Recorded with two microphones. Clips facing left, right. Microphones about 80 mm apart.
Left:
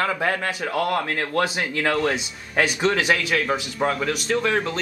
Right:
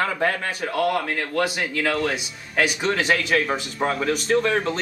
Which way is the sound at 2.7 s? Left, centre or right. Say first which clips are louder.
Left 1 dB; centre.